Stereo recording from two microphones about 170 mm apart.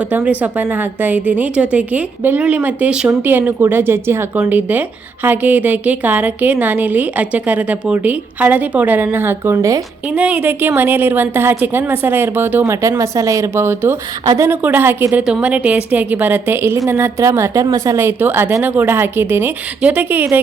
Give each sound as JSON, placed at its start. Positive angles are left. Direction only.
{"t": 0.1, "sound": "a woman's voice", "side_deg": -10}
{"t": 10.2, "sound": "a woman's voice", "side_deg": -10}